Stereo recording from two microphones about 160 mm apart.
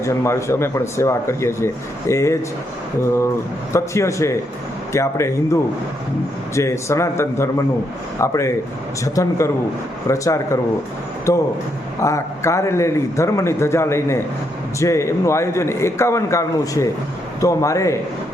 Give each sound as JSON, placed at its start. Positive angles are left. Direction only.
{"t": 0.0, "sound": "a man's voice", "side_deg": 20}
{"t": 3.7, "sound": "a man's voice", "side_deg": 15}